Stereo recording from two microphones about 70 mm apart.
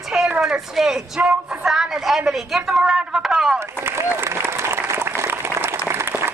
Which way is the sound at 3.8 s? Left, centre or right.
Right.